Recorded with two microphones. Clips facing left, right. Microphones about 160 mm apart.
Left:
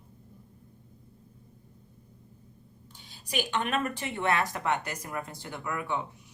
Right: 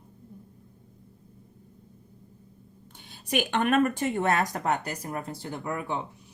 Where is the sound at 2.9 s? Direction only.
55° right (ahead or behind).